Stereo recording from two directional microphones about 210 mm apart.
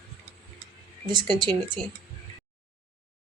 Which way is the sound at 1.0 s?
20° right (ahead or behind).